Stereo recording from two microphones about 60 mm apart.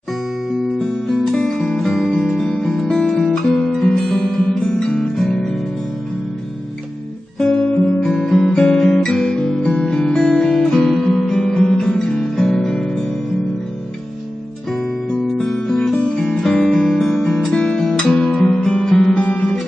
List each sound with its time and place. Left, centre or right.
0.7 s music: centre
2.5 s music: centre
2.8 s guitar: centre
3.4 s music: centre
7.3 s guitar: centre
8.1 s music: centre
14.7 s music: centre
19.1 s music: left